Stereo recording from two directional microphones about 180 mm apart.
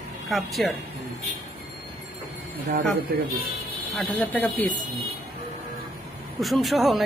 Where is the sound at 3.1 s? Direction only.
55° right (ahead or behind).